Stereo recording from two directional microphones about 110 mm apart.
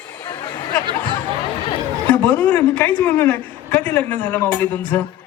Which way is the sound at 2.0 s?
15° left (ahead or behind).